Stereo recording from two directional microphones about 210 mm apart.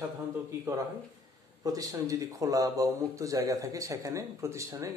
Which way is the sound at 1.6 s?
15° right (ahead or behind).